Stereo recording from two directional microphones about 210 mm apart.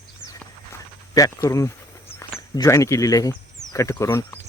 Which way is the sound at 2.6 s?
15° left (ahead or behind).